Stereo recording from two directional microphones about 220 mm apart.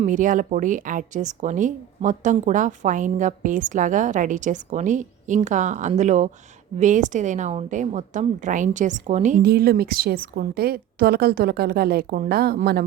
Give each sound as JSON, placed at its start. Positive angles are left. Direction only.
{"t": 0.0, "sound": "a woman's voice", "side_deg": -35}